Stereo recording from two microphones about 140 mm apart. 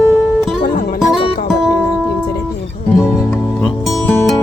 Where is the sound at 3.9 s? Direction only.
15° left (ahead or behind).